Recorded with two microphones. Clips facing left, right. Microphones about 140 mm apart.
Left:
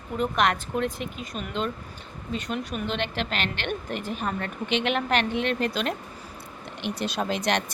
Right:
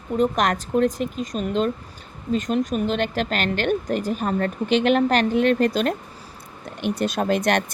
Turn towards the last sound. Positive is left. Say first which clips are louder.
# right 5 dB
turn(degrees=-50)  # may be behind; listen again after turning